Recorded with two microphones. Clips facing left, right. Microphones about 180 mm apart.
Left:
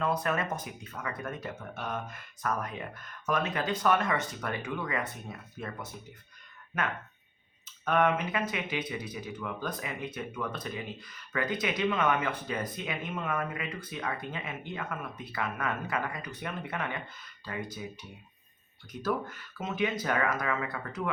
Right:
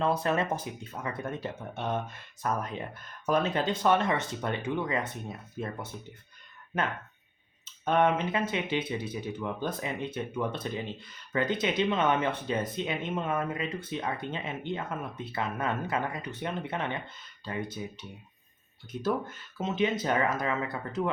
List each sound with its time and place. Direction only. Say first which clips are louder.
0.0 s speech: right 3 dB; 30° right (ahead or behind)
7.6 s speech: right 2 dB; 25° right (ahead or behind)